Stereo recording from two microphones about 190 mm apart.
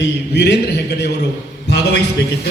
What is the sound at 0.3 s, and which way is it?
Speech, 65° left (ahead or behind).